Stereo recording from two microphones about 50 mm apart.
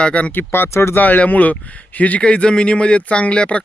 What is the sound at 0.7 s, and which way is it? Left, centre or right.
Speech, left.